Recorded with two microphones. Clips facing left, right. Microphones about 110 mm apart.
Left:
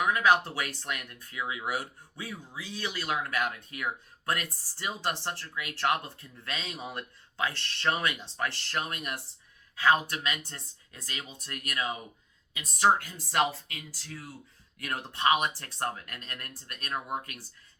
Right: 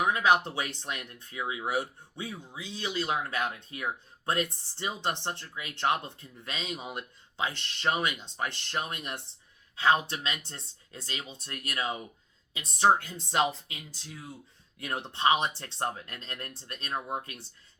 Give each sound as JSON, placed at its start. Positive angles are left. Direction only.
{"t": 0.0, "sound": "speech", "side_deg": -25}